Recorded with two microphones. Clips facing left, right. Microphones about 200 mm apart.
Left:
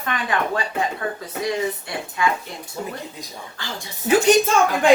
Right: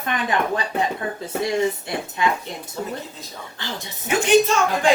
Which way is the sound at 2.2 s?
20° right (ahead or behind).